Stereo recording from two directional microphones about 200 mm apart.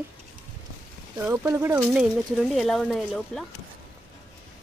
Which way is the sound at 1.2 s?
10° right (ahead or behind).